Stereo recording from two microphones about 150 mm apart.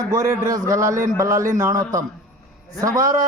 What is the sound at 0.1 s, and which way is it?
A man's voice, 20° right (ahead or behind).